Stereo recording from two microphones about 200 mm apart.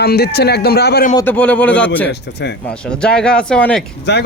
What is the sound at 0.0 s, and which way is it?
Speech, 55° left (ahead or behind).